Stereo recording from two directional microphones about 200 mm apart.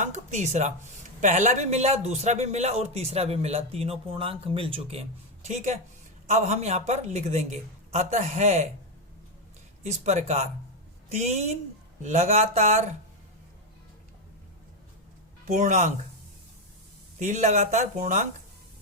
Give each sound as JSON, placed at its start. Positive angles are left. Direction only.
{"t": 0.0, "sound": "speech", "side_deg": -35}
{"t": 9.8, "sound": "speech", "side_deg": -35}
{"t": 15.4, "sound": "speech", "side_deg": -35}
{"t": 17.2, "sound": "speech", "side_deg": -35}